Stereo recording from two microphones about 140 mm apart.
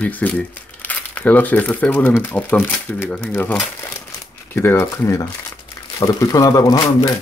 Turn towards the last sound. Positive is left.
turn(degrees=25)  # may be behind; listen again after turning